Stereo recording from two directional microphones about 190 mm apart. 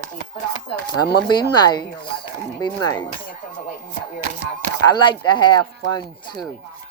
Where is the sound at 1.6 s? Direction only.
20° left (ahead or behind).